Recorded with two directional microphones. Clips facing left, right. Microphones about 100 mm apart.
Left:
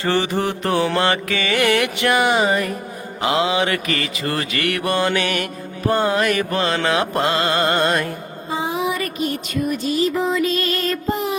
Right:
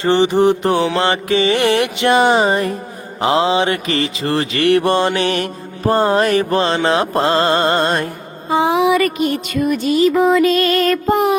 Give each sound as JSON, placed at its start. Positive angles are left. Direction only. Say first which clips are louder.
{"t": 0.0, "sound": "mantra", "louder": "right 7 dB", "side_deg": -20}
{"t": 8.4, "sound": "music", "louder": "right 9 dB", "side_deg": -80}